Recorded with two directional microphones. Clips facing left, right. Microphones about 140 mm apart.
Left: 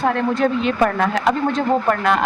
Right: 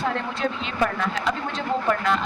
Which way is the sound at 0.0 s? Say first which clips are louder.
Left 8 dB; 55° left (ahead or behind).